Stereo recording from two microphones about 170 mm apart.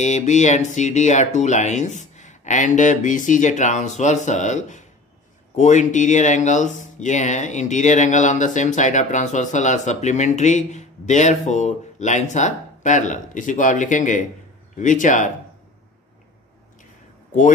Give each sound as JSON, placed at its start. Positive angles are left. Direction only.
{"t": 0.0, "sound": "speech", "side_deg": 45}